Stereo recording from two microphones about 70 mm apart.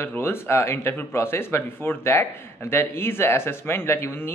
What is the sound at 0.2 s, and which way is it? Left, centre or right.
Speech, left.